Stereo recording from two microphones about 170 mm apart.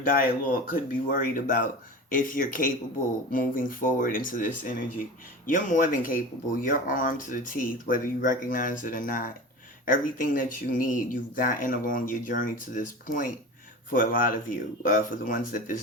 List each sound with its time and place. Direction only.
0.0 s speech: 55° left (ahead or behind)